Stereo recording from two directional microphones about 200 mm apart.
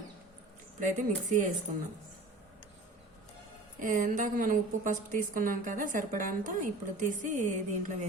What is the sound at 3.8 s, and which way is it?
Speech, 40° right (ahead or behind).